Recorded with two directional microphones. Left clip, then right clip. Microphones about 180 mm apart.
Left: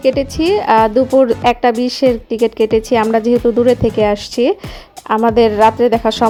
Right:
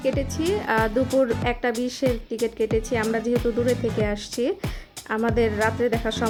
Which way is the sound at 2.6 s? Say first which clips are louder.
Left 11 dB; 30° left (ahead or behind).